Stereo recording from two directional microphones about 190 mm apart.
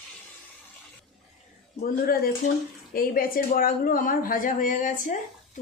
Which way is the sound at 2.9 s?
50° left (ahead or behind).